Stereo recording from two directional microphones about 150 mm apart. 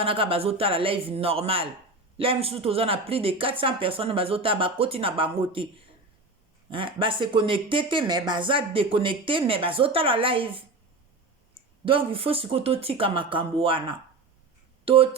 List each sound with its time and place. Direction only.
0.0 s speech: 35° right (ahead or behind)
6.7 s speech: 35° right (ahead or behind)
11.9 s speech: 35° right (ahead or behind)
14.8 s speech: 40° right (ahead or behind)